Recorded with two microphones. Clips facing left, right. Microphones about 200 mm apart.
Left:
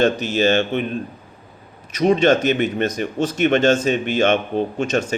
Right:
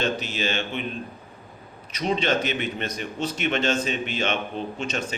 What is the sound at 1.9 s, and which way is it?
A man's voice, 45° left (ahead or behind).